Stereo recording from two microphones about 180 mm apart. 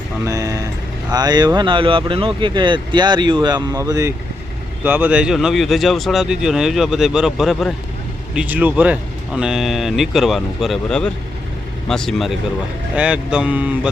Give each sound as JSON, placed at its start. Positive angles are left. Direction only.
{"t": 0.3, "sound": "speech", "side_deg": -15}